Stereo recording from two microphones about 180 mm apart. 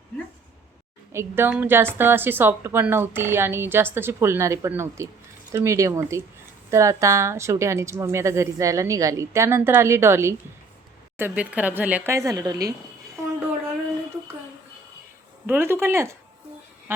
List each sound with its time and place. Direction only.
1.1 s a woman's voice: 15° right (ahead or behind)
15.4 s a woman's voice: 10° right (ahead or behind)